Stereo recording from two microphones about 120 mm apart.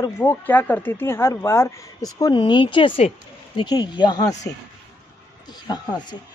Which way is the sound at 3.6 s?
35° left (ahead or behind).